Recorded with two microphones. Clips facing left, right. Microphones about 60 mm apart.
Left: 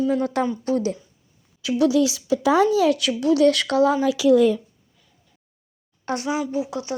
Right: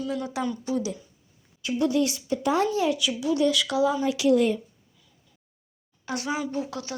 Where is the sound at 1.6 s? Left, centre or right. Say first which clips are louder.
Left 5 dB; left.